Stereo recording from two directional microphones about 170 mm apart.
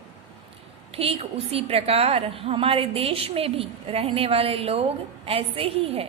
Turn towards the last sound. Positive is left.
turn(degrees=-35)  # may be behind; listen again after turning